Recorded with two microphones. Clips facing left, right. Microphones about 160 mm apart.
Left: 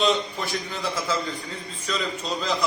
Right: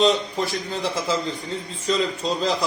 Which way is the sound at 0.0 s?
30° right (ahead or behind).